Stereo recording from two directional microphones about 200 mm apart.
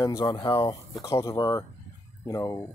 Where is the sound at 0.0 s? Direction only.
20° left (ahead or behind).